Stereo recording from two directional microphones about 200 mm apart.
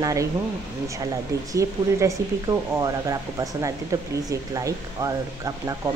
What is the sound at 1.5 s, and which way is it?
Speech, 15° right (ahead or behind).